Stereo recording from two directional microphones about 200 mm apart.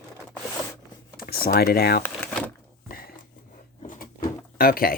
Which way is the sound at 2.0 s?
5° left (ahead or behind).